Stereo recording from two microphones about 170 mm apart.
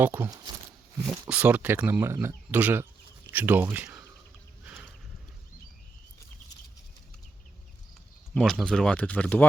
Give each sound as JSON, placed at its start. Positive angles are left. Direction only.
{"t": 0.0, "sound": "speech", "side_deg": -10}
{"t": 1.3, "sound": "speech", "side_deg": -10}
{"t": 4.6, "sound": "boat", "side_deg": -10}
{"t": 8.4, "sound": "speech", "side_deg": 0}